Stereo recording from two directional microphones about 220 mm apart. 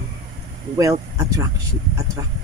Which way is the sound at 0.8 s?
15° right (ahead or behind).